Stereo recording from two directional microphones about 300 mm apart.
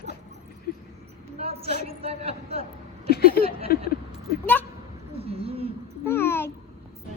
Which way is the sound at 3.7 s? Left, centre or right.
Left.